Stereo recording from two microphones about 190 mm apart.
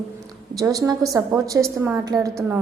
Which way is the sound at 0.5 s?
15° right (ahead or behind).